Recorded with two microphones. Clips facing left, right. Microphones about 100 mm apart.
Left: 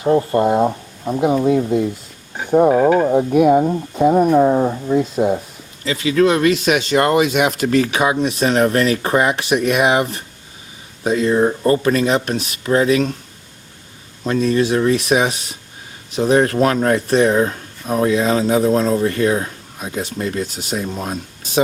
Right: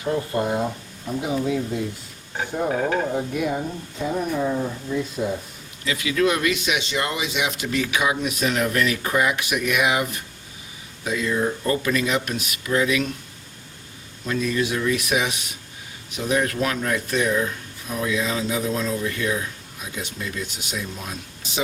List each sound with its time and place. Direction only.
0.0 s speech: 45° left (ahead or behind)
2.6 s stir: 25° left (ahead or behind)
3.1 s speech: 55° left (ahead or behind)
5.1 s speech: 60° left (ahead or behind)
5.8 s speech: 35° left (ahead or behind)
14.3 s speech: 40° left (ahead or behind)